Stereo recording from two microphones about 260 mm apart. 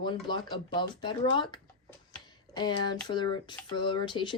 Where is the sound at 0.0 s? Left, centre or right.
Centre.